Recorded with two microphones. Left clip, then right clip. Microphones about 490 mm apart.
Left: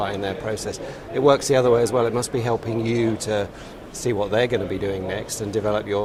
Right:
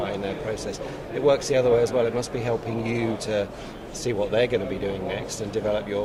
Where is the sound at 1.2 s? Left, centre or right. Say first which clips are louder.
Left 3 dB; left.